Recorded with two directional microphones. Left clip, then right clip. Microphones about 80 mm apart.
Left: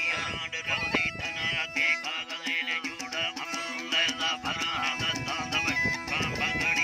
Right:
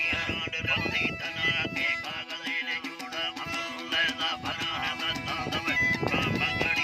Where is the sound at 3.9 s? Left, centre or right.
Right.